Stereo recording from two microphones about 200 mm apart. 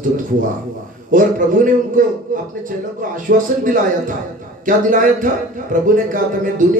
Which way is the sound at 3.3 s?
45° right (ahead or behind).